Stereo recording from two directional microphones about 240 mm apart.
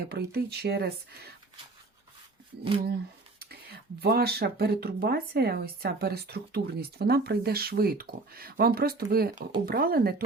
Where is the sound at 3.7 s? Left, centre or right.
Right.